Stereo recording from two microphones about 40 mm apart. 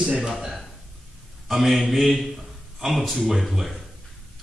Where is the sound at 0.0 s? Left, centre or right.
Centre.